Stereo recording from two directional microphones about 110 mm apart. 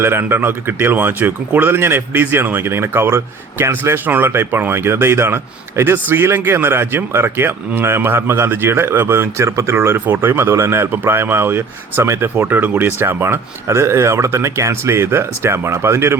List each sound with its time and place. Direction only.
0.0 s speech: 20° right (ahead or behind)